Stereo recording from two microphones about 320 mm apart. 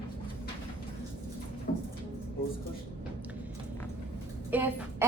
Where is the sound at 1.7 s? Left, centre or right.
Left.